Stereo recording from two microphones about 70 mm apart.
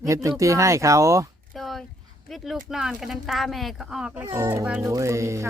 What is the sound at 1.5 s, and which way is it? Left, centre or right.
Speech, centre.